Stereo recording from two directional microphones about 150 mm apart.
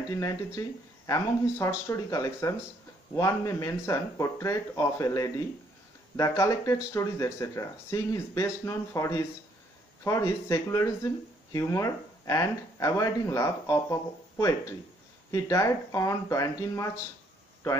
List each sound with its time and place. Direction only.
0.2 s speech: 20° left (ahead or behind)